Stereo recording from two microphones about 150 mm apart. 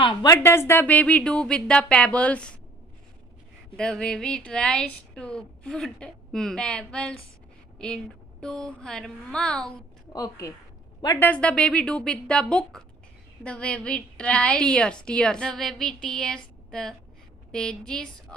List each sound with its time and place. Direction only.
0.0 s a woman's voice: 25° left (ahead or behind); by 2.5 s 10° left (ahead or behind)
3.7 s speech: 5° left (ahead or behind)
10.1 s a woman's voice: 25° left (ahead or behind)
11.1 s a woman's voice: 10° left (ahead or behind)